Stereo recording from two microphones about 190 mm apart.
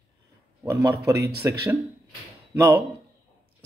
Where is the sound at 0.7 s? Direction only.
15° right (ahead or behind).